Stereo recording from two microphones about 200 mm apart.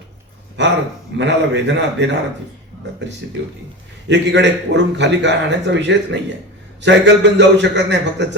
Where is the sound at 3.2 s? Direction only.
60° right (ahead or behind).